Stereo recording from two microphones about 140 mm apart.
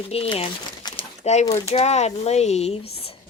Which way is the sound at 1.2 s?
50° left (ahead or behind).